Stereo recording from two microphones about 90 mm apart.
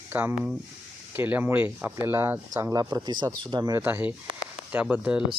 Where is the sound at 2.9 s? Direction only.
55° right (ahead or behind).